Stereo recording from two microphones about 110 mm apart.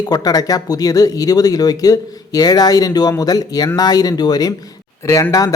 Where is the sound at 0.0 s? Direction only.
35° left (ahead or behind).